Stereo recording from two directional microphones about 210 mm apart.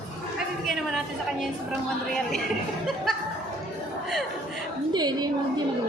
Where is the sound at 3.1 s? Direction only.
Centre (ahead or behind).